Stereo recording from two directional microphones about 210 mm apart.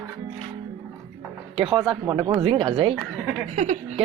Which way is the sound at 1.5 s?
25° right (ahead or behind).